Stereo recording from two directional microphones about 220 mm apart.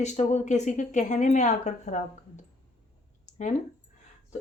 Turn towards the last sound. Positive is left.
turn(degrees=35)  # may be behind; listen again after turning